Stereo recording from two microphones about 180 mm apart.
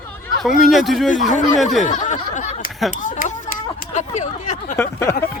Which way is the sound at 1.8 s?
40° left (ahead or behind).